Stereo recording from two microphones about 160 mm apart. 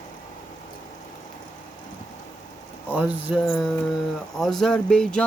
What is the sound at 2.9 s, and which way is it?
Speech, 10° right (ahead or behind).